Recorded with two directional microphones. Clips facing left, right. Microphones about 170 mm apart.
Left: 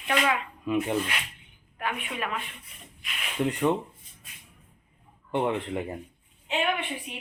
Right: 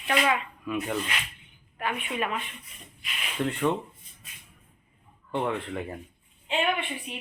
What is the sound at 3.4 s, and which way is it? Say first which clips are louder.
Speech: left 1 dB; 15° left (ahead or behind).